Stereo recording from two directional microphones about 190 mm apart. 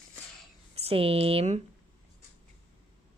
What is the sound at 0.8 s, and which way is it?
Speech, 30° right (ahead or behind).